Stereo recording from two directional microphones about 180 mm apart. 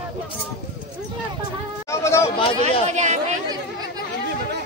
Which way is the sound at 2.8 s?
40° right (ahead or behind).